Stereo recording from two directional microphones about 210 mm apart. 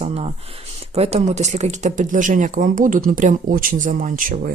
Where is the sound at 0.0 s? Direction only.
30° right (ahead or behind).